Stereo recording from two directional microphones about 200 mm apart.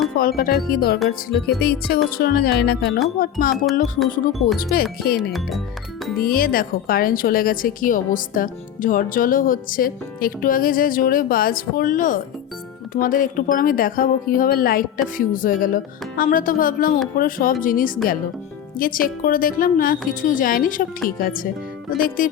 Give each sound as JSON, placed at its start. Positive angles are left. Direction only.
{"t": 0.2, "sound": "a woman's voice", "side_deg": 45}
{"t": 4.7, "sound": "a woman's voice", "side_deg": 50}
{"t": 5.3, "sound": "speech", "side_deg": 0}
{"t": 6.1, "sound": "a woman's voice", "side_deg": 50}